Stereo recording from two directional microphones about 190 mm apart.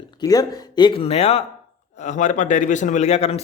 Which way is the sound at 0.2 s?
20° left (ahead or behind).